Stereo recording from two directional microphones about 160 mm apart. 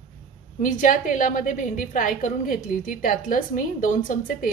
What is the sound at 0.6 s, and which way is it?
A woman's voice, 55° left (ahead or behind).